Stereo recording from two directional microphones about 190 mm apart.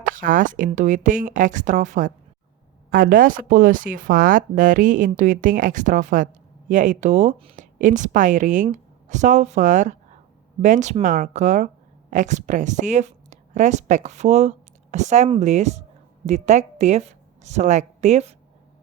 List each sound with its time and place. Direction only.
0.1 s a woman's voice: 45° right (ahead or behind)